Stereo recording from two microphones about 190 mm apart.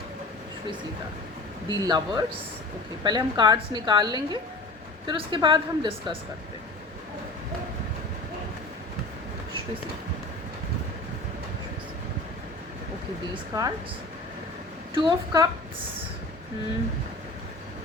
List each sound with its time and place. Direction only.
1.8 s a woman's voice: 20° right (ahead or behind)
13.3 s a woman's voice: 20° right (ahead or behind)
14.9 s a woman's voice: 25° right (ahead or behind)